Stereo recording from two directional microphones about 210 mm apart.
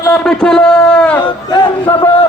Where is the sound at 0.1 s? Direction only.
5° left (ahead or behind).